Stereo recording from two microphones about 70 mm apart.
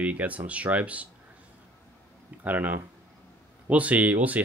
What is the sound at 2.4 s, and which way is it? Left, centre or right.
Speech, right.